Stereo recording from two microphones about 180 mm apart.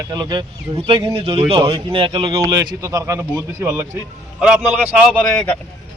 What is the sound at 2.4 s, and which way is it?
A man's voice, 20° right (ahead or behind).